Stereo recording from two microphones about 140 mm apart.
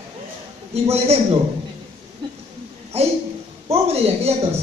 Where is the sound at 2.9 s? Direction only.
45° right (ahead or behind).